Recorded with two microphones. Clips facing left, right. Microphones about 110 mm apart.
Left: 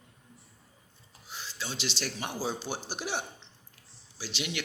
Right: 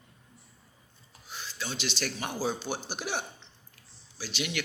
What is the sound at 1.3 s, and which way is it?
A man's voice, 30° left (ahead or behind).